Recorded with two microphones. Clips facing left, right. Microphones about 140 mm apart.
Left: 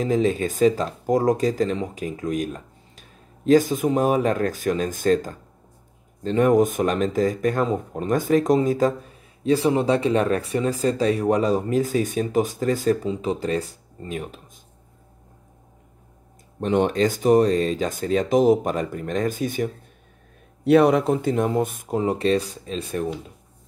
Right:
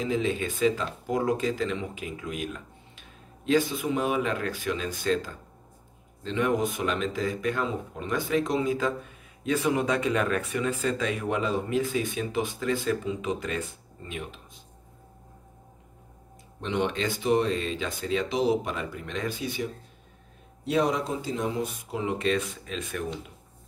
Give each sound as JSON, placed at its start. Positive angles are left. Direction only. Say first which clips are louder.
{"t": 0.0, "sound": "speech", "louder": "left 6 dB", "side_deg": 40}
{"t": 16.5, "sound": "speech", "louder": "left 8 dB", "side_deg": 45}
{"t": 20.6, "sound": "speech", "louder": "left 10 dB", "side_deg": 65}